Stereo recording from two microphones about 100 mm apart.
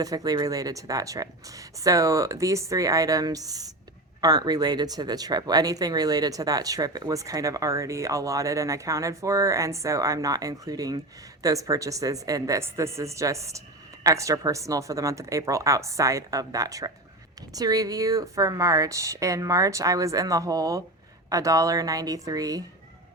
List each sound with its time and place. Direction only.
0.0 s speech: 40° right (ahead or behind)